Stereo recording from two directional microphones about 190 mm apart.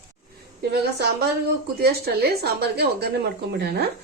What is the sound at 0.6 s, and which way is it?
Speech, 60° right (ahead or behind).